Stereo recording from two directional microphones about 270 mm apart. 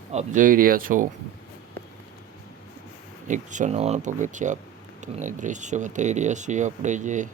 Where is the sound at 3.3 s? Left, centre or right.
Right.